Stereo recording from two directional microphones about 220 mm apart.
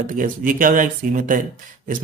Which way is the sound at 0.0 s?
40° right (ahead or behind).